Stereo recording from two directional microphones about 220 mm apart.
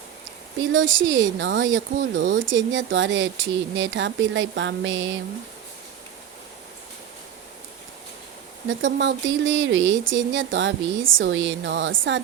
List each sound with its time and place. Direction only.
0.7 s speech: 60° right (ahead or behind)
8.6 s speech: 55° right (ahead or behind)